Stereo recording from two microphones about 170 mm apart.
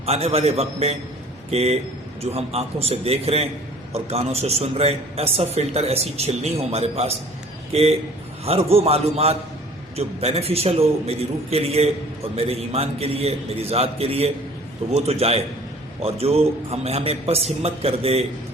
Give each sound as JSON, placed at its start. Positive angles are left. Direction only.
{"t": 0.0, "sound": "a man's voice", "side_deg": -35}